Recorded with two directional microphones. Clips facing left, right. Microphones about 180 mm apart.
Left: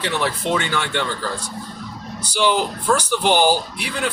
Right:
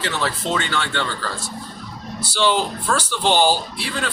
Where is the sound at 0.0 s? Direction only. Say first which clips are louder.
Left 2 dB; 15° left (ahead or behind).